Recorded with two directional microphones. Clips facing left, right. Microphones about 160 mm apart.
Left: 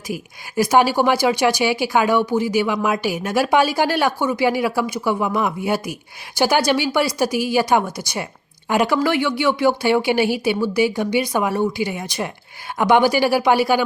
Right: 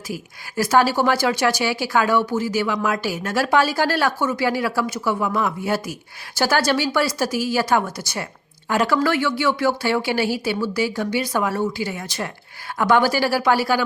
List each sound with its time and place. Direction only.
0.1 s speech: 15° left (ahead or behind)